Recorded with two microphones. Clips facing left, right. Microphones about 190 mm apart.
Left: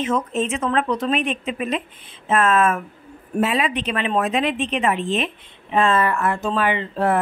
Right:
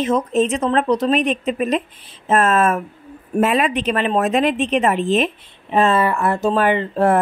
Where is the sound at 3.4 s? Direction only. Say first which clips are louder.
Right 4 dB; 50° right (ahead or behind).